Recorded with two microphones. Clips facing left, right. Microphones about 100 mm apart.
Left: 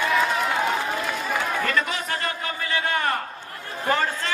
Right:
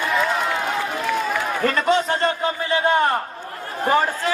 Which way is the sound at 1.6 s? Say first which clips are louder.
Right 7 dB; 35° right (ahead or behind).